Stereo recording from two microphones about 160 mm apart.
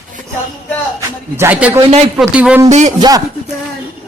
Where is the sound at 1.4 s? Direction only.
15° right (ahead or behind).